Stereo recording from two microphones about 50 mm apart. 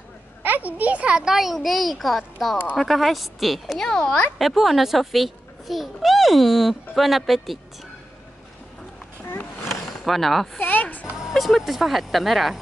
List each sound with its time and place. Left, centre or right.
0.4 s a child's voice: right
1.2 s speech: centre
3.8 s speech: centre
4.4 s a child's voice: centre
10.0 s speech: centre
10.6 s a sound: left
11.1 s speech: centre